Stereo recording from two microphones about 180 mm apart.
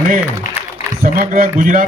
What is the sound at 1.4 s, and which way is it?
Speech, 50° right (ahead or behind).